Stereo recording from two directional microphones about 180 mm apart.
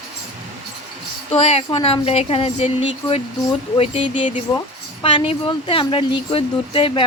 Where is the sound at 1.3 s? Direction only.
35° left (ahead or behind).